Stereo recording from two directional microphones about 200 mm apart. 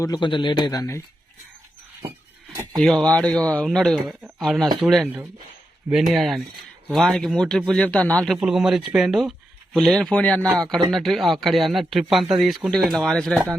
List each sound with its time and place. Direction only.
0.0 s speech: 20° left (ahead or behind)
2.0 s a sound: 20° right (ahead or behind)
2.7 s a man's voice: centre (ahead or behind)